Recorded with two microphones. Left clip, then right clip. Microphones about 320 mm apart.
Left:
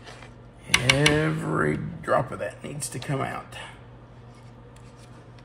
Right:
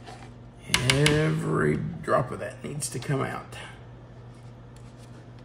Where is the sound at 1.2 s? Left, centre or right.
Centre.